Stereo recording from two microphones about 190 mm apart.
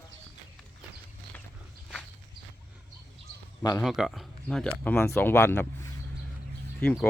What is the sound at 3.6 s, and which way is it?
Speech, 15° left (ahead or behind).